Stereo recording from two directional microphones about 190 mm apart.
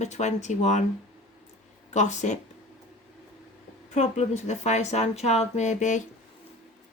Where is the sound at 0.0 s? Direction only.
40° left (ahead or behind).